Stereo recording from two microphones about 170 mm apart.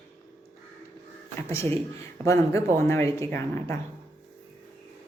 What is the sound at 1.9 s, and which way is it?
Speech, 15° left (ahead or behind).